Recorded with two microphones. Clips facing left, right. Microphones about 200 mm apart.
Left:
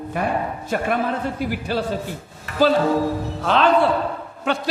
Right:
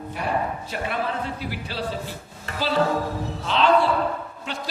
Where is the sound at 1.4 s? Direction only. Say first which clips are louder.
Left 7 dB; 50° left (ahead or behind).